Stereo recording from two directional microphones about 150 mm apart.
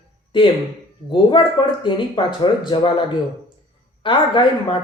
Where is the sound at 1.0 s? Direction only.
30° left (ahead or behind).